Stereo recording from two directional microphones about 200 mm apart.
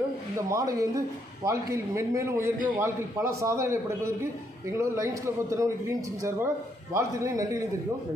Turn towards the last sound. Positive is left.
turn(degrees=-15)  # may be behind; listen again after turning